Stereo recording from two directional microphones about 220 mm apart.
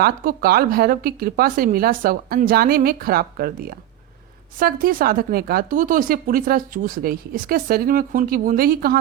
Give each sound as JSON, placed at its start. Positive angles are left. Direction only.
{"t": 0.0, "sound": "speech", "side_deg": -45}